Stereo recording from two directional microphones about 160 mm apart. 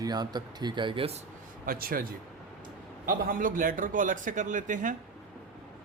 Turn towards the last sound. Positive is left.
turn(degrees=-55)  # may be behind; listen again after turning